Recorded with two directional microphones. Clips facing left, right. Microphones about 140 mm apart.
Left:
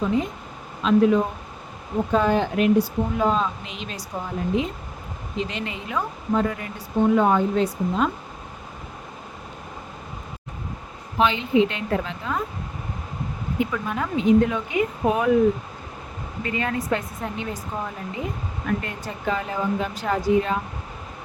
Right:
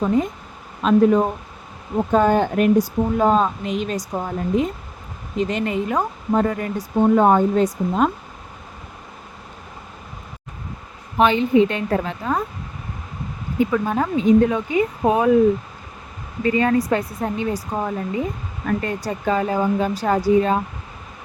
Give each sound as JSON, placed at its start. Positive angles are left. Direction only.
{"t": 0.8, "sound": "speech", "side_deg": -45}
{"t": 11.2, "sound": "speech", "side_deg": -45}
{"t": 13.6, "sound": "speech", "side_deg": -40}
{"t": 16.4, "sound": "speech", "side_deg": -35}